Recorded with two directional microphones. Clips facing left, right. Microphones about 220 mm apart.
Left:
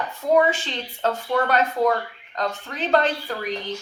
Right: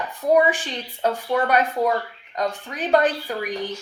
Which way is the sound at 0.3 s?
15° right (ahead or behind).